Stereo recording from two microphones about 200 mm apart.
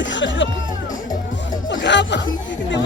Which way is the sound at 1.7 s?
60° left (ahead or behind).